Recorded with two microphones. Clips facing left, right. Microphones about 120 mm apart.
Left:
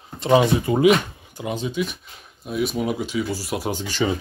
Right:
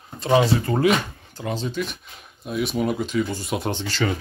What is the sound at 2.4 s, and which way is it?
Speech, centre (ahead or behind).